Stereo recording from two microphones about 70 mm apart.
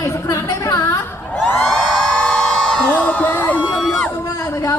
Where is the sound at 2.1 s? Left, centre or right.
Centre.